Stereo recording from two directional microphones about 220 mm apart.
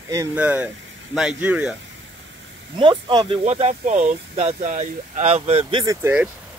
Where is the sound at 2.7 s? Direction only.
20° right (ahead or behind).